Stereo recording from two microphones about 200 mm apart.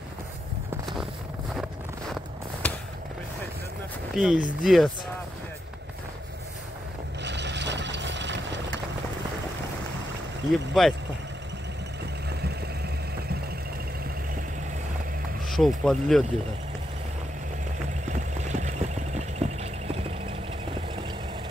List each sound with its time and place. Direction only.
1.5 s a sound: centre (ahead or behind)
4.1 s speech: centre (ahead or behind)
7.2 s vehicle: 60° right (ahead or behind)
10.7 s speech: centre (ahead or behind)
15.4 s speech: centre (ahead or behind)
18.5 s a sound: 35° right (ahead or behind)